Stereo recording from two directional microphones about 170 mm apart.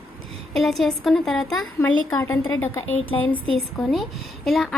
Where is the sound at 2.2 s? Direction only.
20° left (ahead or behind).